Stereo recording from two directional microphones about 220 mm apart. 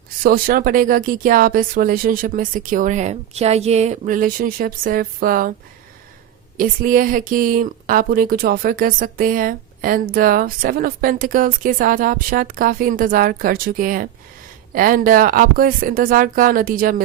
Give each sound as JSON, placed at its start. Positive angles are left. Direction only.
{"t": 0.2, "sound": "speech", "side_deg": -40}
{"t": 6.6, "sound": "speech", "side_deg": -40}